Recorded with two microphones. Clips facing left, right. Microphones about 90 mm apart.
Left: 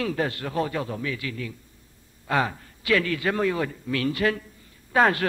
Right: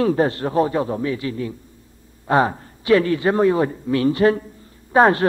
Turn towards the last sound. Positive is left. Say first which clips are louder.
# right 6 dB
turn(degrees=-30)  # may be behind; listen again after turning